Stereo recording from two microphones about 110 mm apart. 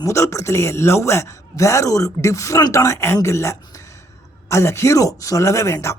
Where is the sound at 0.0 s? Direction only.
25° left (ahead or behind).